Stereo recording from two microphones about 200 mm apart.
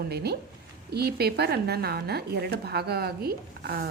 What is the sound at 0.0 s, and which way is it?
A woman's voice, 55° right (ahead or behind).